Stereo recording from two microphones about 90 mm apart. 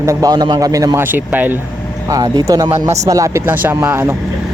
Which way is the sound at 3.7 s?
25° right (ahead or behind).